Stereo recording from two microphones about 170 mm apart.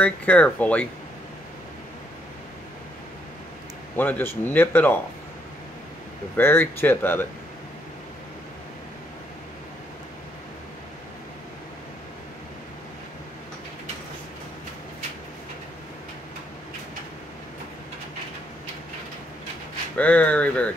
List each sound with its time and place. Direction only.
0.0 s speech: 10° left (ahead or behind)
3.9 s speech: 10° left (ahead or behind)
6.3 s speech: 10° left (ahead or behind)
20.0 s speech: 10° left (ahead or behind)